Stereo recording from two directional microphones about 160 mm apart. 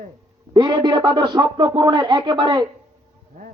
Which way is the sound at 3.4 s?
55° right (ahead or behind).